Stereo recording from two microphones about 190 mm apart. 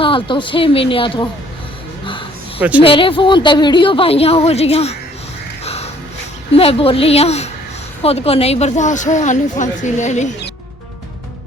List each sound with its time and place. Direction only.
0.0 s a woman's voice: 25° left (ahead or behind)
2.6 s speech: 5° right (ahead or behind)
2.8 s a woman's voice: 25° left (ahead or behind)
5.6 s a sound: 35° left (ahead or behind)
6.5 s speech: 30° left (ahead or behind)